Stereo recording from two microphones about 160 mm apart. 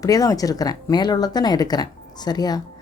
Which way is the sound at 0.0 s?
20° left (ahead or behind).